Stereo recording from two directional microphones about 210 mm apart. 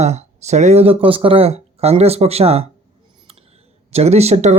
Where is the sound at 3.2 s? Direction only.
30° right (ahead or behind).